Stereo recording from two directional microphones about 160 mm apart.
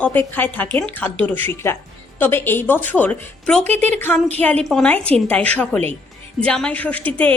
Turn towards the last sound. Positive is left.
turn(degrees=10)  # may be behind; listen again after turning